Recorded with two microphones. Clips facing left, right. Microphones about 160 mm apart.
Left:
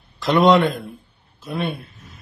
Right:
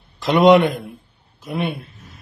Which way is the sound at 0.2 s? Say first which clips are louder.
Right 2 dB; 20° right (ahead or behind).